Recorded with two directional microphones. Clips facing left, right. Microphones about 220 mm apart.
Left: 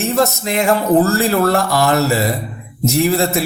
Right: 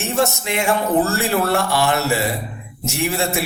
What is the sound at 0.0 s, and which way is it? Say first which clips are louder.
A man's voice: left 4 dB; 40° left (ahead or behind).